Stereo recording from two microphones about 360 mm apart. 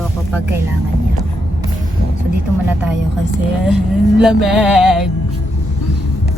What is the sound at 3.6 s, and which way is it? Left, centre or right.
Music, centre.